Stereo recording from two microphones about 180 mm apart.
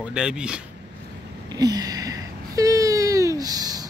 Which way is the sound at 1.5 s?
20° right (ahead or behind).